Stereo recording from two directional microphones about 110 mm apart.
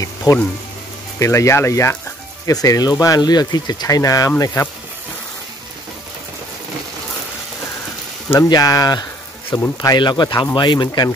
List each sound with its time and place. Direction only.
0.0 s speech: 30° left (ahead or behind)
8.4 s speech: 35° left (ahead or behind)